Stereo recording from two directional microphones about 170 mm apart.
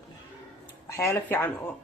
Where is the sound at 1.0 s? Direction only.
15° left (ahead or behind).